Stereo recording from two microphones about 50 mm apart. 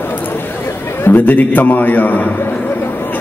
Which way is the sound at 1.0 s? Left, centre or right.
Left.